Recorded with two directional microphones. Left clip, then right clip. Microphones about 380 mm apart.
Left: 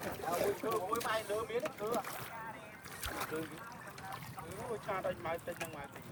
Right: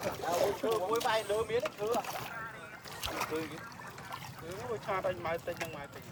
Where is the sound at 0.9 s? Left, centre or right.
Right.